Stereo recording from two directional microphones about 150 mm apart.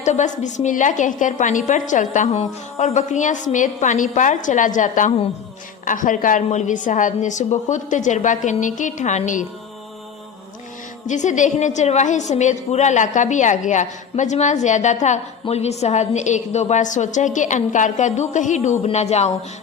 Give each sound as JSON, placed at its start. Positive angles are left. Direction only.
{"t": 0.0, "sound": "a woman's voice", "side_deg": 55}
{"t": 11.0, "sound": "a woman's voice", "side_deg": 55}